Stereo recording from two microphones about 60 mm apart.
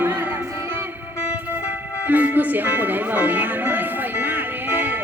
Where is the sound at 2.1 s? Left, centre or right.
Right.